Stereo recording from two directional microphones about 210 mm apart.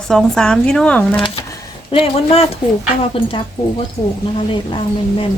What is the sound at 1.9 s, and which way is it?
Speech, 30° left (ahead or behind).